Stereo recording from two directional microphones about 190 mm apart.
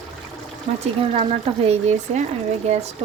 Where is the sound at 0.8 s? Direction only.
30° right (ahead or behind).